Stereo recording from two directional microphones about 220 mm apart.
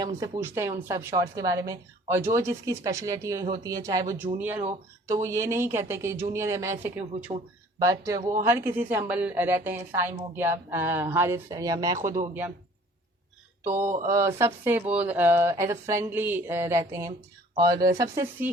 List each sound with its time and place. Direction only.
0.0 s a woman's voice: 15° right (ahead or behind)
11.9 s speech: 35° right (ahead or behind)
13.8 s speech: 35° right (ahead or behind)
14.1 s a woman's voice: 15° right (ahead or behind)